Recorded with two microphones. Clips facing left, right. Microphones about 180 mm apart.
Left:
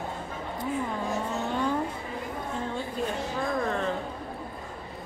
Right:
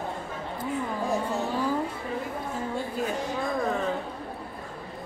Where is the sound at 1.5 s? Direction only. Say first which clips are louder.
Left 1 dB; 5° right (ahead or behind).